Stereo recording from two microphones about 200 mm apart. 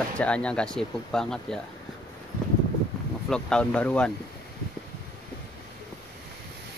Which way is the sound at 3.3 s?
5° left (ahead or behind).